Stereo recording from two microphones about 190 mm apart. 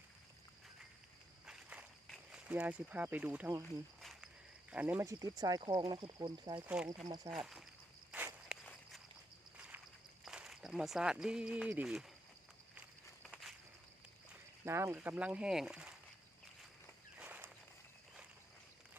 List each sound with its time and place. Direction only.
1.5 s a sound: 5° right (ahead or behind)
4.0 s cricket: centre (ahead or behind)
4.7 s speech: 10° right (ahead or behind)
6.6 s speech: 5° right (ahead or behind)
8.1 s walk: 10° right (ahead or behind)
8.6 s walk: 5° left (ahead or behind)
10.2 s speech: centre (ahead or behind)
13.2 s walk: centre (ahead or behind)
14.6 s speech: 15° right (ahead or behind)
17.2 s walk: 10° right (ahead or behind)